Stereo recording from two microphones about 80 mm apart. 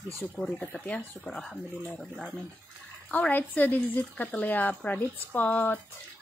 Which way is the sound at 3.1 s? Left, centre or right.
Centre.